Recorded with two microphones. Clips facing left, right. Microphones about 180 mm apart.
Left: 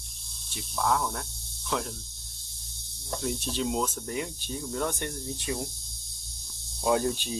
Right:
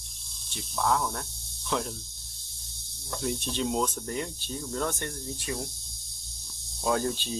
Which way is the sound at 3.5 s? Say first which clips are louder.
Right 1 dB; centre (ahead or behind).